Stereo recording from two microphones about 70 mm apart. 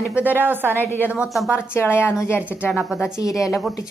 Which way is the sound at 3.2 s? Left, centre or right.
Left.